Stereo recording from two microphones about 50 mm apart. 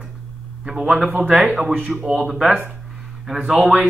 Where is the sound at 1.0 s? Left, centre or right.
Right.